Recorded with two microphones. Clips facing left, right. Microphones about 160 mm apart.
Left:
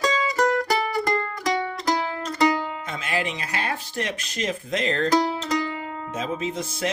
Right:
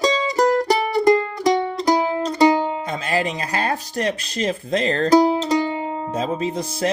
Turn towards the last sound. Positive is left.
turn(degrees=-35)  # may be behind; listen again after turning